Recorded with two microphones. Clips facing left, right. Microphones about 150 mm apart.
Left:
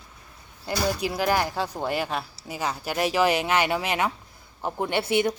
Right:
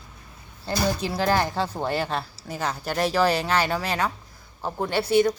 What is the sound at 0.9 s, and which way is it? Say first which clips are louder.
A woman's voice: right 1 dB; 15° left (ahead or behind).